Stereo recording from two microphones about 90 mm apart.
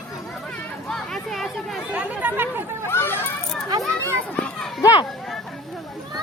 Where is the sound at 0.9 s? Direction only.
Centre (ahead or behind).